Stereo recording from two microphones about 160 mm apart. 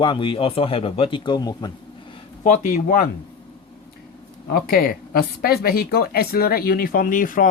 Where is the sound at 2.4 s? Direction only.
50° left (ahead or behind).